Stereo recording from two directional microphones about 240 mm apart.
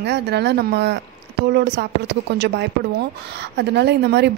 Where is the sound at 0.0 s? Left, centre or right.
Right.